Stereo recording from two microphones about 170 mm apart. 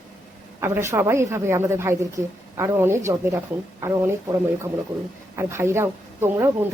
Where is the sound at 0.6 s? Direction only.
15° right (ahead or behind).